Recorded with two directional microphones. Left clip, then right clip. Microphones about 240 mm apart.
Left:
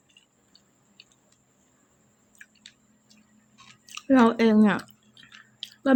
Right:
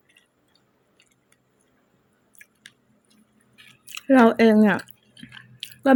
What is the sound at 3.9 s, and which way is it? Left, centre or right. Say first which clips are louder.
Drip: right 4 dB; centre.